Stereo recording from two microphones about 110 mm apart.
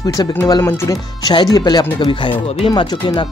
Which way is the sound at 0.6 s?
25° left (ahead or behind).